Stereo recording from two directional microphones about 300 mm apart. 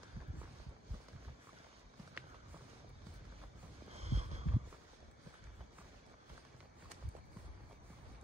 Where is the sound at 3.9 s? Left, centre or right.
Right.